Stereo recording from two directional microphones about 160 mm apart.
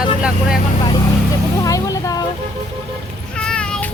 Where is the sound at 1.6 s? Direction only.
20° left (ahead or behind).